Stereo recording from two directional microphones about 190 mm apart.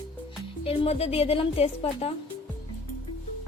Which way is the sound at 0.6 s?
30° left (ahead or behind).